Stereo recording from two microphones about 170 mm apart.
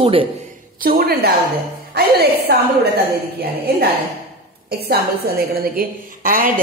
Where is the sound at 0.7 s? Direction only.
60° right (ahead or behind).